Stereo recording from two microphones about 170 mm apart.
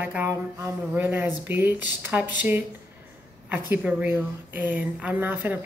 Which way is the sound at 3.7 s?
10° right (ahead or behind).